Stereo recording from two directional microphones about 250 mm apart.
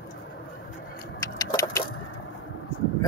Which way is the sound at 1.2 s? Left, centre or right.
Centre.